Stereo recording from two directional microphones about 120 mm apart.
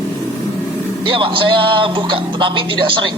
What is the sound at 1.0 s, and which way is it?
A man's voice, 45° right (ahead or behind).